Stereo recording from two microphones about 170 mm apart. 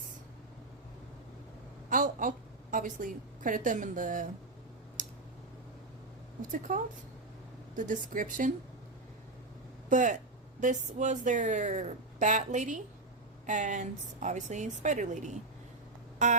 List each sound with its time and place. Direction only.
1.9 s a woman's voice: 50° right (ahead or behind)
5.0 s clicking: 50° right (ahead or behind)
6.5 s a woman's voice: 50° right (ahead or behind)
9.9 s a woman's voice: 50° right (ahead or behind)